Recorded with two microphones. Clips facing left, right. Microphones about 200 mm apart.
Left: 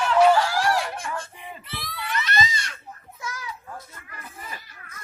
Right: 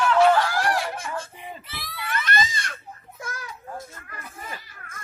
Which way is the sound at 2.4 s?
50° right (ahead or behind).